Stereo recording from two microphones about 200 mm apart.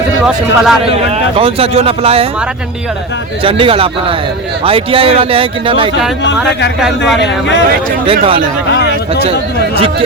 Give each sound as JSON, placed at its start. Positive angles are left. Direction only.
{"t": 0.3, "sound": "a man's voice", "side_deg": -5}
{"t": 1.4, "sound": "a man's voice", "side_deg": -30}
{"t": 3.4, "sound": "a man's voice", "side_deg": -25}
{"t": 7.2, "sound": "speech", "side_deg": 60}
{"t": 8.0, "sound": "a man's voice", "side_deg": -25}